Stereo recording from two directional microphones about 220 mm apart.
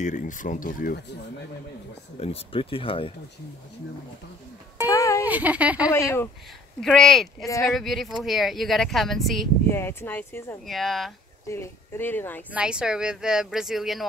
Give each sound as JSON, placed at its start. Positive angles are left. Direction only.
{"t": 0.0, "sound": "speech", "side_deg": 35}
{"t": 2.1, "sound": "speech", "side_deg": 25}
{"t": 4.8, "sound": "a sound", "side_deg": 15}
{"t": 5.2, "sound": "speech", "side_deg": -5}
{"t": 5.9, "sound": "speech", "side_deg": 10}
{"t": 6.8, "sound": "speech", "side_deg": 0}
{"t": 9.7, "sound": "speech", "side_deg": 10}
{"t": 11.4, "sound": "speech", "side_deg": 10}
{"t": 12.5, "sound": "speech", "side_deg": -5}